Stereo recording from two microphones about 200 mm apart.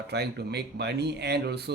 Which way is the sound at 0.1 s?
55° right (ahead or behind).